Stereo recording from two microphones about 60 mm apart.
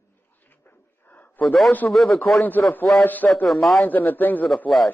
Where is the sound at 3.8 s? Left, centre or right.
Left.